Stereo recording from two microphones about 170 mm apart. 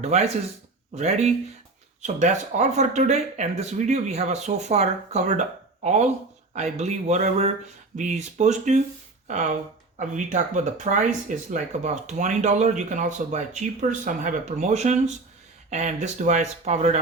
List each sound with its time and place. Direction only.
0.0 s speech: 40° right (ahead or behind)